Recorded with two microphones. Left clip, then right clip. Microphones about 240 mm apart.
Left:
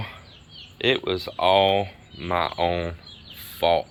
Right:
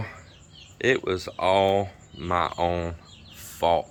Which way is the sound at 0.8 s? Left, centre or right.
Centre.